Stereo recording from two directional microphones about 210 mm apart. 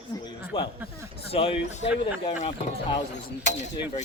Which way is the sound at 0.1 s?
15° left (ahead or behind).